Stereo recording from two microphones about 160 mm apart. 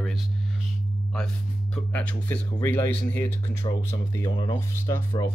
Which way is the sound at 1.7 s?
10° left (ahead or behind).